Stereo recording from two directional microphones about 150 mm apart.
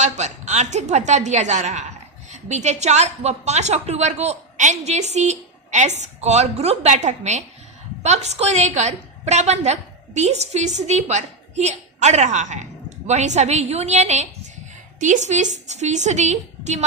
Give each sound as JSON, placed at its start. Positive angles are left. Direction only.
{"t": 0.0, "sound": "a woman's voice", "side_deg": -50}